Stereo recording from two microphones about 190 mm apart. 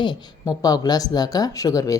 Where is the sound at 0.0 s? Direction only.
20° left (ahead or behind).